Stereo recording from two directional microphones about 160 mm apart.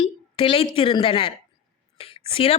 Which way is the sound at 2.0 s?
35° left (ahead or behind).